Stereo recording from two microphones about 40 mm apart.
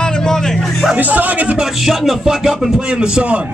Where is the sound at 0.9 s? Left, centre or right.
Right.